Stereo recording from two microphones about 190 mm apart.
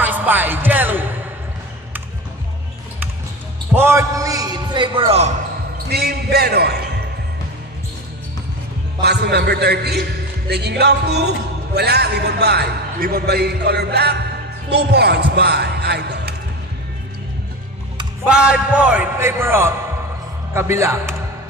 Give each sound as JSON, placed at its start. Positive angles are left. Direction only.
{"t": 0.0, "sound": "music", "side_deg": -10}
{"t": 3.7, "sound": "a sound", "side_deg": -15}
{"t": 5.9, "sound": "music", "side_deg": -55}
{"t": 9.0, "sound": "music", "side_deg": -60}
{"t": 18.2, "sound": "a man's voice", "side_deg": -5}